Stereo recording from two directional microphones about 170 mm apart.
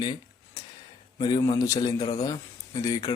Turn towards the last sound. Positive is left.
turn(degrees=20)  # may be behind; listen again after turning